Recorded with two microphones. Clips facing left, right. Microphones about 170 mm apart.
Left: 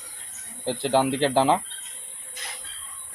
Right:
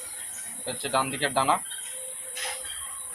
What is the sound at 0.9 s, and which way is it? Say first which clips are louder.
Speech: left 7 dB; 30° left (ahead or behind).